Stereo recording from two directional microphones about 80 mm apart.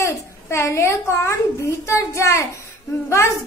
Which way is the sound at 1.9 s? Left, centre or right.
Left.